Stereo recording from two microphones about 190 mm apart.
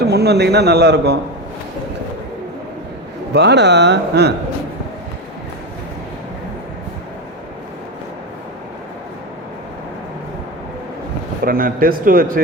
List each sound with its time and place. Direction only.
0.0 s a man's voice: 55° right (ahead or behind)
3.3 s a man's voice: 65° right (ahead or behind)
11.4 s speech: 50° right (ahead or behind)